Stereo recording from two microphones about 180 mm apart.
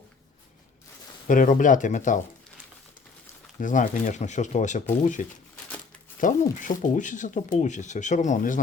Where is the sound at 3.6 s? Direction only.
45° left (ahead or behind).